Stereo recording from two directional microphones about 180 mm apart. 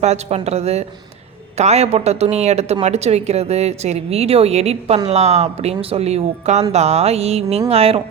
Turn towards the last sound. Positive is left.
turn(degrees=-35)  # may be behind; listen again after turning